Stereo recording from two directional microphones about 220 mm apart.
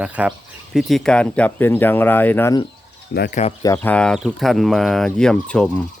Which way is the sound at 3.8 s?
5° left (ahead or behind).